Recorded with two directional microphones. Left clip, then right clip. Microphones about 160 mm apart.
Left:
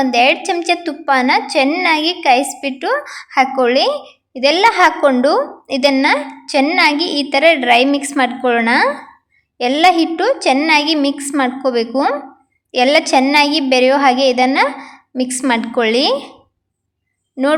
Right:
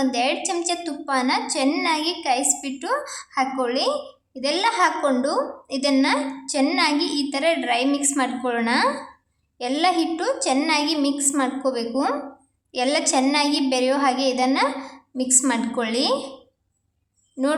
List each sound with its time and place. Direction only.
0.0 s a woman's voice: 30° left (ahead or behind)